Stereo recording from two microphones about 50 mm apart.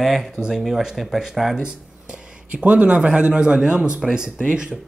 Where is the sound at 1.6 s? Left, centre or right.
Centre.